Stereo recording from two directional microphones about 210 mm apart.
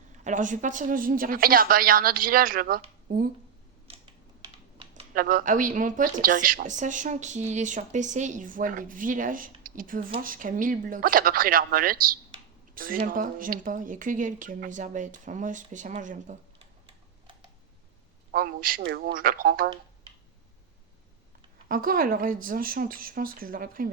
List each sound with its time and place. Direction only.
0.3 s a woman's voice: 35° right (ahead or behind)
4.4 s typing: 25° right (ahead or behind)
5.1 s a woman's voice: 45° right (ahead or behind); by 17.3 s 25° right (ahead or behind)
18.3 s a woman's voice: 45° right (ahead or behind)
21.7 s a woman's voice: 40° right (ahead or behind)